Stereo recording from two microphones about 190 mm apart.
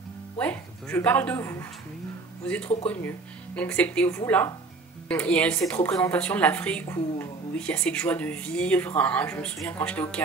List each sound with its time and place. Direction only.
0.4 s a woman's voice: 10° left (ahead or behind)